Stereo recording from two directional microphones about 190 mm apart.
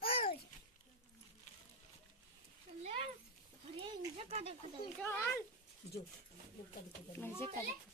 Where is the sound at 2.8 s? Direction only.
35° right (ahead or behind).